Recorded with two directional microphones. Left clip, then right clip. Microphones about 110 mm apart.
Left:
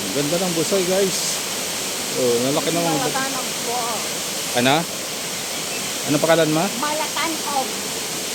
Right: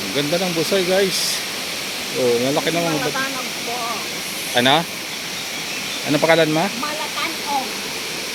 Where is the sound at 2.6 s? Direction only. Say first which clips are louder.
Right 1 dB; 10° right (ahead or behind).